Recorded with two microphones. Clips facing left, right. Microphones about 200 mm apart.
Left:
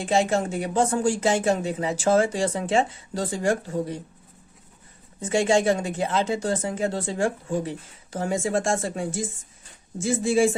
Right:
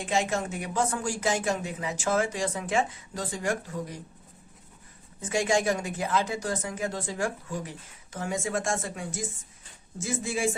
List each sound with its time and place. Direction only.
0.0 s speech: 35° left (ahead or behind)
5.2 s speech: 25° left (ahead or behind)